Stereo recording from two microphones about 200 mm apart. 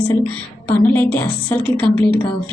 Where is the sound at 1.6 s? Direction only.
25° right (ahead or behind).